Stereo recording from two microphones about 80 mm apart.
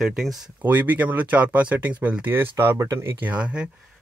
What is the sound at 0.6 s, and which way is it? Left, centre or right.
Speech, right.